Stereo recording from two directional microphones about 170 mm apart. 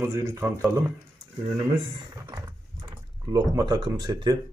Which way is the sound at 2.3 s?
25° right (ahead or behind).